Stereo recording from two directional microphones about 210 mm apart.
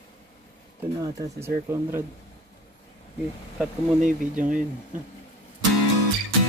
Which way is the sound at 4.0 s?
35° right (ahead or behind).